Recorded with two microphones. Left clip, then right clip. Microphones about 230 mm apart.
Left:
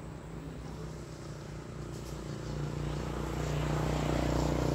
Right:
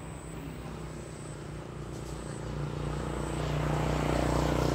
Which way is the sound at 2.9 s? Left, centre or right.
Left.